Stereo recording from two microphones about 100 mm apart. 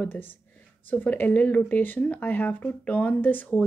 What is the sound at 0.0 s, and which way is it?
Speech, 20° left (ahead or behind).